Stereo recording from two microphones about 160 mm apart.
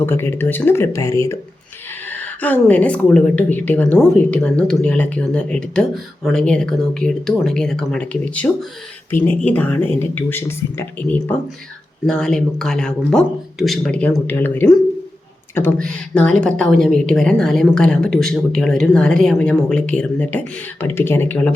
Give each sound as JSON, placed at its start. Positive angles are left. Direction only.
{"t": 0.0, "sound": "a woman's voice", "side_deg": 15}